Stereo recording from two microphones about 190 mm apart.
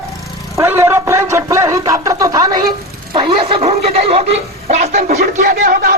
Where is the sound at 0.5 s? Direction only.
15° right (ahead or behind).